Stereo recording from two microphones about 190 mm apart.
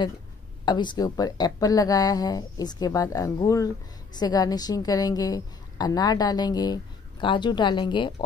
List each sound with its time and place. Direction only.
0.7 s speech: 25° left (ahead or behind)